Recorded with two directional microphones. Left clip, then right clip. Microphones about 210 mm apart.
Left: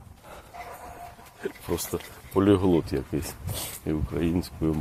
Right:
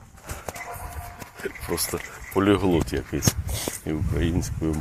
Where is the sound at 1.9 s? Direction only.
Centre (ahead or behind).